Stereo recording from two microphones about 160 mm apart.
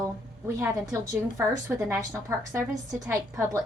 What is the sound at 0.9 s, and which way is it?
A woman's voice, 15° right (ahead or behind).